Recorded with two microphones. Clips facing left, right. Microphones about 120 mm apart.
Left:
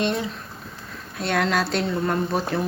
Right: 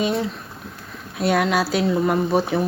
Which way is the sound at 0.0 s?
Centre (ahead or behind).